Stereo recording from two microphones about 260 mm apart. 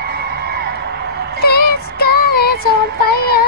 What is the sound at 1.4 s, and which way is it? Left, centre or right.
Music, left.